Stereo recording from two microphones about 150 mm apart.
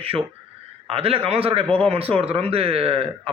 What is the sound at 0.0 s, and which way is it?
A man's voice, 40° right (ahead or behind).